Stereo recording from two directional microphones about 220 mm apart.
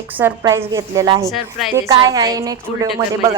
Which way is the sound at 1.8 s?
15° right (ahead or behind).